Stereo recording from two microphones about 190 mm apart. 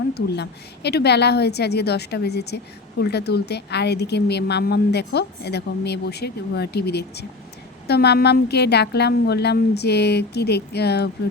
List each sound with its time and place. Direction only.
0.1 s speech: 60° left (ahead or behind)